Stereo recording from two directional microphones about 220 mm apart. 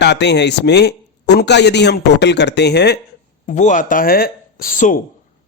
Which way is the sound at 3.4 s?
35° left (ahead or behind).